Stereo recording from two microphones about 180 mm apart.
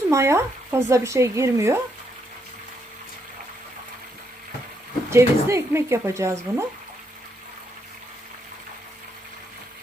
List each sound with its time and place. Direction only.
0.1 s speech: 15° right (ahead or behind)
5.1 s speech: 15° right (ahead or behind)